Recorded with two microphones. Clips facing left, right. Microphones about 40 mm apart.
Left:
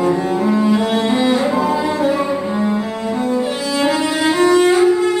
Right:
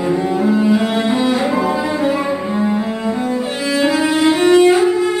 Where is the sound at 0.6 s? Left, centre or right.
Right.